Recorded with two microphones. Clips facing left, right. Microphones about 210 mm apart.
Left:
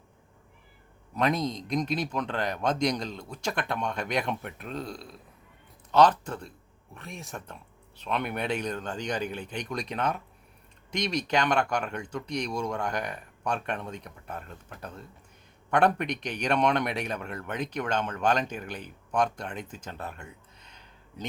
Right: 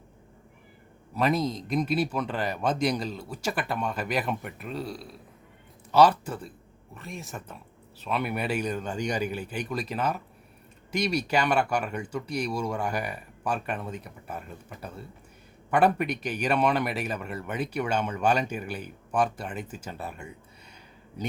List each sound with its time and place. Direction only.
1.1 s speech: 5° right (ahead or behind)